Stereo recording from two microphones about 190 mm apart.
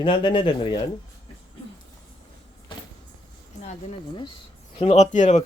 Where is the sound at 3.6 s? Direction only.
30° left (ahead or behind).